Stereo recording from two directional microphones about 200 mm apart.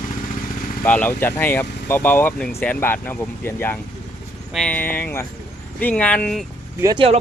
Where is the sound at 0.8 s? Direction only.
10° left (ahead or behind).